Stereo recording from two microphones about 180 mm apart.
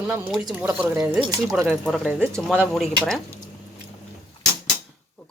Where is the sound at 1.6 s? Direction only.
Centre (ahead or behind).